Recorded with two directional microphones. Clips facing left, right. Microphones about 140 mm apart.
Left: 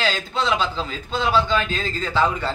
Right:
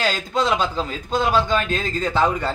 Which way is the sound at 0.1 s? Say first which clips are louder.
Right 2 dB; 45° right (ahead or behind).